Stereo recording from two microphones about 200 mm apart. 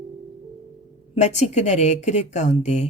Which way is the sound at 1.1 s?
35° left (ahead or behind).